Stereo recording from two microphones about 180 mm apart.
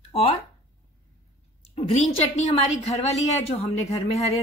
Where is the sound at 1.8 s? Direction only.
35° left (ahead or behind).